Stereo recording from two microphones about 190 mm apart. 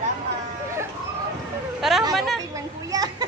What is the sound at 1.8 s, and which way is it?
Speech, centre (ahead or behind).